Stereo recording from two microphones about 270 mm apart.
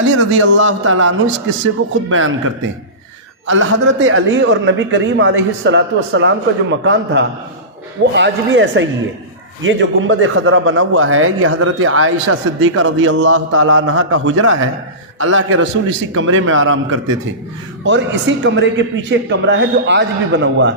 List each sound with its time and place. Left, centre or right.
0.2 s a man's voice: right